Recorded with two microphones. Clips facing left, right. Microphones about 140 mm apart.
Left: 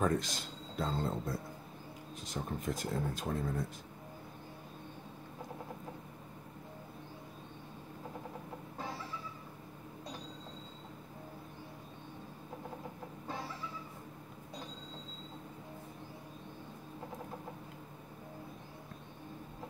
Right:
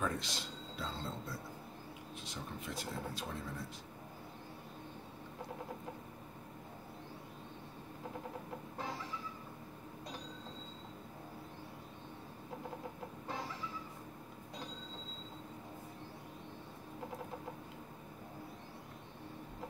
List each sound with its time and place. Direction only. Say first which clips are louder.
0.0 s speech: left 6 dB; 45° left (ahead or behind)